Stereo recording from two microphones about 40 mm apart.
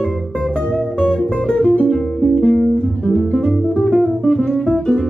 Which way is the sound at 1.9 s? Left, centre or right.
Centre.